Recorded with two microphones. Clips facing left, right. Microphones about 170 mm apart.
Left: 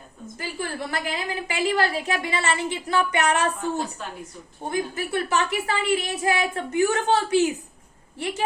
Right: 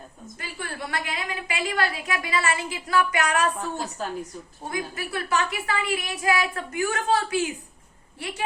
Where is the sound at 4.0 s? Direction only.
40° right (ahead or behind).